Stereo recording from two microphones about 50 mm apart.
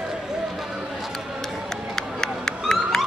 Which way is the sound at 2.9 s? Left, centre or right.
Centre.